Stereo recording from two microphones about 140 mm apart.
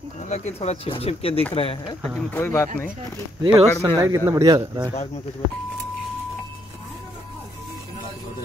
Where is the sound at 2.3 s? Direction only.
20° left (ahead or behind).